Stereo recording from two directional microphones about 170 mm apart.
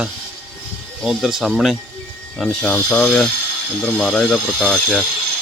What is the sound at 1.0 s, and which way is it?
Speech, centre (ahead or behind).